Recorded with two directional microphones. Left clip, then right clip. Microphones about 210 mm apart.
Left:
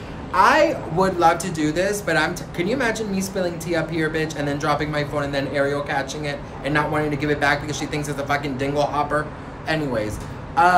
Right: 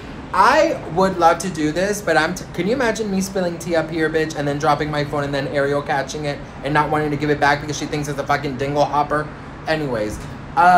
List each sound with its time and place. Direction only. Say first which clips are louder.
0.3 s speech: right 2 dB; 5° left (ahead or behind)
1.2 s speech: right 2 dB; 5° right (ahead or behind)